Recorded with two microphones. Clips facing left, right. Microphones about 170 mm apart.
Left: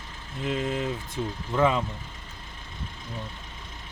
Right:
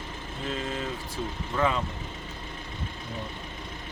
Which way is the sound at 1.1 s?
20° left (ahead or behind).